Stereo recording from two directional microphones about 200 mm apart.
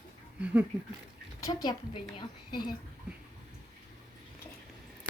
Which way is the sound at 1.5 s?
20° left (ahead or behind).